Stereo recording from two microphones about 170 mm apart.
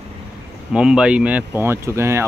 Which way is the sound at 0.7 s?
5° right (ahead or behind).